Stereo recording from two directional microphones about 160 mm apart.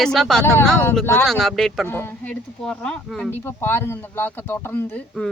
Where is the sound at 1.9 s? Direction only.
15° left (ahead or behind).